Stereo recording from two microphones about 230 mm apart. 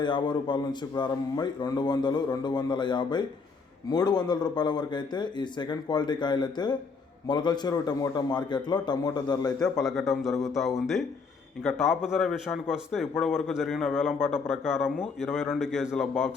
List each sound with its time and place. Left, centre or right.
0.0 s a man's voice: centre
9.6 s a man's voice: centre